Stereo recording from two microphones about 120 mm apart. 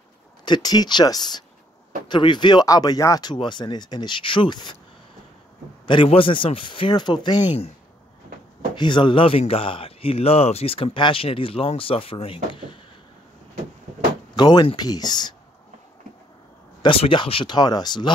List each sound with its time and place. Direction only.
0.5 s speech: 35° left (ahead or behind)
5.9 s speech: 45° left (ahead or behind)
8.7 s speech: 40° left (ahead or behind)
14.3 s speech: 40° left (ahead or behind)
16.8 s speech: 45° left (ahead or behind)